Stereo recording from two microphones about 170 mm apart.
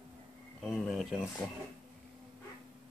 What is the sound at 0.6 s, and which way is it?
Speech, centre (ahead or behind).